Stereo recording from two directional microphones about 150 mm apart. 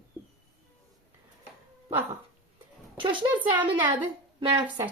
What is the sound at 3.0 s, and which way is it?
Speech, 35° right (ahead or behind).